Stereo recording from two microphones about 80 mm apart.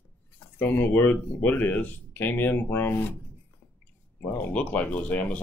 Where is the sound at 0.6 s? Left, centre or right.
Left.